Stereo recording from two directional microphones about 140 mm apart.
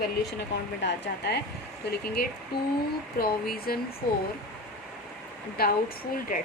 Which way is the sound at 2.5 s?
90° left.